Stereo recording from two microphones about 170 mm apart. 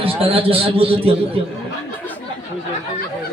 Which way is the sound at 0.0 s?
35° right (ahead or behind).